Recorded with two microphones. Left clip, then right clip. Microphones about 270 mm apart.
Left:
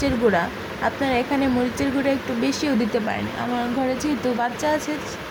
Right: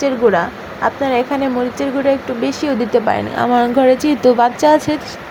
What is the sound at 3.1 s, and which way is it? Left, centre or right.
Speech, centre.